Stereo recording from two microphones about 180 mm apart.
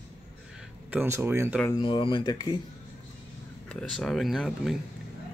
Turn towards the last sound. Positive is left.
turn(degrees=0)  # may be behind; listen again after turning